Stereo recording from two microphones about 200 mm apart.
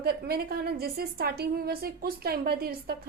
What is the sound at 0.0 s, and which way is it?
A woman's voice, 50° right (ahead or behind).